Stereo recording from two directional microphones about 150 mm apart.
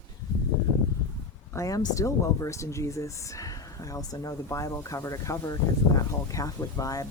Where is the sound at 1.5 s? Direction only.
20° left (ahead or behind).